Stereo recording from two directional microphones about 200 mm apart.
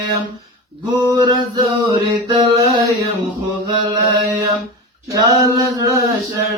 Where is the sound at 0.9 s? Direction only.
20° right (ahead or behind).